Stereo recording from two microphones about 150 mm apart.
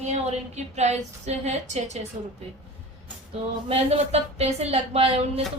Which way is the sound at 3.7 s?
45° right (ahead or behind).